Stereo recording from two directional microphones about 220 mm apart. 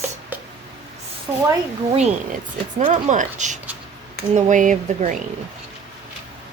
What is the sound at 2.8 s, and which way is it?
Speech, 35° right (ahead or behind).